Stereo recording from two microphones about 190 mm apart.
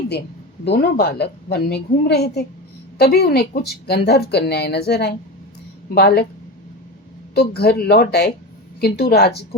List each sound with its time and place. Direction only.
0.6 s a woman's voice: 60° left (ahead or behind)
7.3 s a woman's voice: 55° left (ahead or behind)